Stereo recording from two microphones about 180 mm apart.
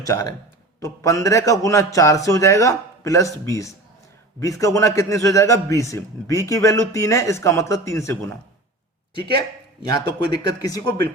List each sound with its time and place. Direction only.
0.1 s a man's voice: 20° left (ahead or behind)
9.8 s speech: 20° left (ahead or behind)